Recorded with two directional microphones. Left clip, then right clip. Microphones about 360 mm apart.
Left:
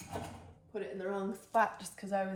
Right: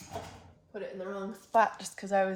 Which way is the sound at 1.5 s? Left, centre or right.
Right.